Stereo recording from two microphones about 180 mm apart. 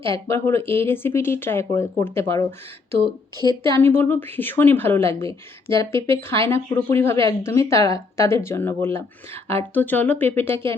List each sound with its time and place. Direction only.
0.0 s a woman's voice: 15° left (ahead or behind)
3.3 s a woman's voice: 25° right (ahead or behind)
3.8 s a woman's voice: 10° left (ahead or behind)